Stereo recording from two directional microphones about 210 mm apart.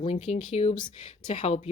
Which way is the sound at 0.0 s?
25° left (ahead or behind).